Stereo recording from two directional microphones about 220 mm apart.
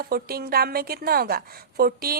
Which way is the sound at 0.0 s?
45° right (ahead or behind).